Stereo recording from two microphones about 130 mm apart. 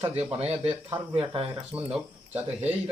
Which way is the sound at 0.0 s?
50° right (ahead or behind).